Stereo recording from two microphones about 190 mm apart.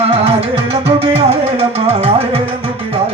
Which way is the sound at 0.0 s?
35° right (ahead or behind).